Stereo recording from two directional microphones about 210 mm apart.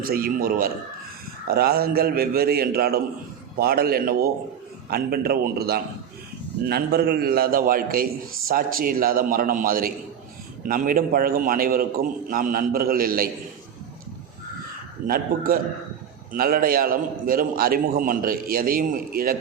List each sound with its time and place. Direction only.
0.0 s a man's voice: 45° right (ahead or behind)
15.0 s a man's voice: 45° right (ahead or behind)